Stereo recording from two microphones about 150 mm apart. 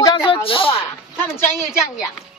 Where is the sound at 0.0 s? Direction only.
35° left (ahead or behind).